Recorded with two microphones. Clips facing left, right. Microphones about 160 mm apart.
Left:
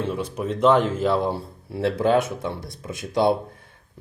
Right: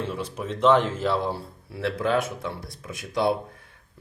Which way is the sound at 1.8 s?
25° left (ahead or behind).